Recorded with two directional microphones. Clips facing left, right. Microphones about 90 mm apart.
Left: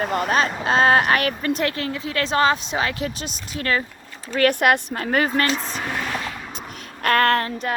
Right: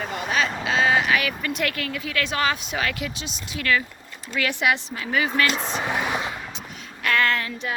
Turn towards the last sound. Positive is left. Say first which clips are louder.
# left 5 dB
turn(degrees=45)  # may be behind; listen again after turning